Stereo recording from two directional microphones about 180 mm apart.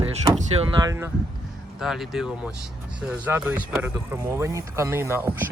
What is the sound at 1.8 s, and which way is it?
Speech, centre (ahead or behind).